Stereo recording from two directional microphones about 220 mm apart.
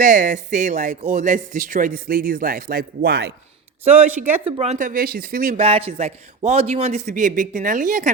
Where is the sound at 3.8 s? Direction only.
30° right (ahead or behind).